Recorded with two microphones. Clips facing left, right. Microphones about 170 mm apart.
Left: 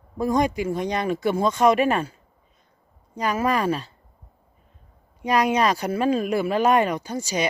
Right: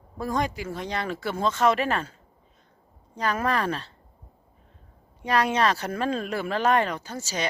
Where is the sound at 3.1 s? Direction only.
10° left (ahead or behind).